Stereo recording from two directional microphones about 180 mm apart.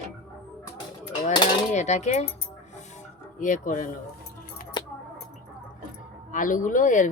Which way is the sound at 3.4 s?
45° left (ahead or behind).